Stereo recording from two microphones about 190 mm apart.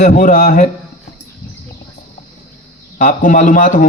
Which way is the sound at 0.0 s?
40° left (ahead or behind).